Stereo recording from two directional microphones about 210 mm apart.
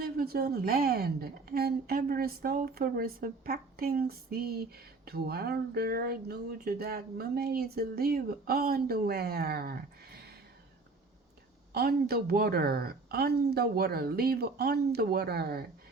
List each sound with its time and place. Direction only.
0.0 s speech: 45° right (ahead or behind)
11.7 s speech: 50° right (ahead or behind)